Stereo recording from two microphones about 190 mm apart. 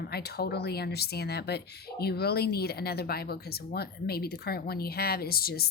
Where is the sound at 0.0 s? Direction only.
55° left (ahead or behind).